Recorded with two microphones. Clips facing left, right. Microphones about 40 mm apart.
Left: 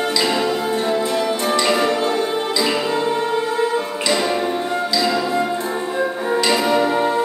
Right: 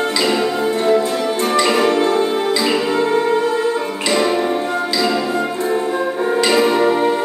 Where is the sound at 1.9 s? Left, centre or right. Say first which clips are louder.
Right 4 dB; right.